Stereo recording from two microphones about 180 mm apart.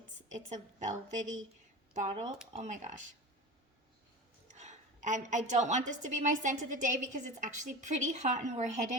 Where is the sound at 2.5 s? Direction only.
40° right (ahead or behind).